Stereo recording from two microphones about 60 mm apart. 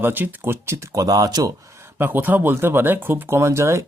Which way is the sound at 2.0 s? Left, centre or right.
Right.